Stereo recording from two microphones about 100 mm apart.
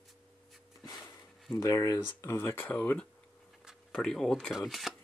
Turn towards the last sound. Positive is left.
turn(degrees=0)  # may be behind; listen again after turning